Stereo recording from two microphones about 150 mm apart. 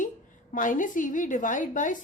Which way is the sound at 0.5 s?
60° left (ahead or behind).